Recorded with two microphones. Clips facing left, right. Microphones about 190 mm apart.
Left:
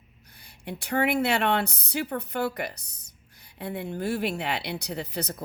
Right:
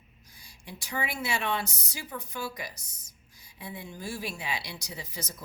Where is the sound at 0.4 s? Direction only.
60° left (ahead or behind).